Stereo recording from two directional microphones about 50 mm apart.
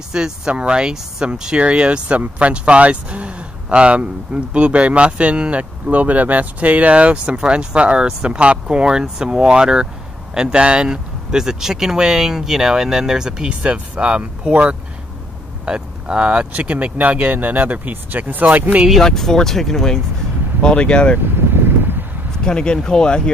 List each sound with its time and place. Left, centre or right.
0.1 s speech: centre
13.6 s speech: right
19.0 s speech: centre
20.6 s speech: left
22.4 s speech: centre